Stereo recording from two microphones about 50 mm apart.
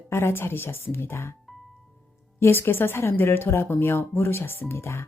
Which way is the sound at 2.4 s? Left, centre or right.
Left.